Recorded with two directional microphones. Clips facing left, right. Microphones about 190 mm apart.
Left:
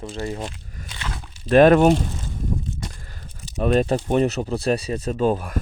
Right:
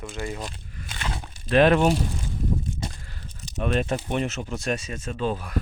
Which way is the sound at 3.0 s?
40° left (ahead or behind).